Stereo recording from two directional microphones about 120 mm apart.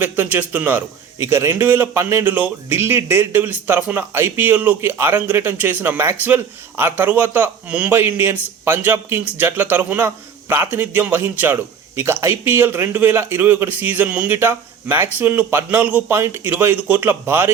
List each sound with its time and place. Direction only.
0.0 s a man's voice: 15° right (ahead or behind)